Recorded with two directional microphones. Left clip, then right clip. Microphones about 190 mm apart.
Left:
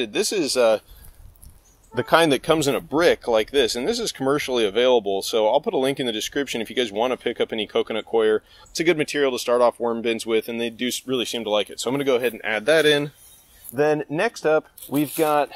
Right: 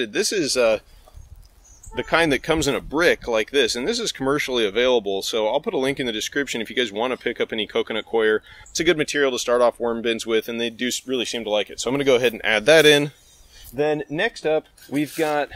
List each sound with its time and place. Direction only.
0.0 s speech: centre (ahead or behind)
2.0 s speech: 15° left (ahead or behind)
12.0 s a man's voice: 25° right (ahead or behind)
13.7 s speech: 20° left (ahead or behind)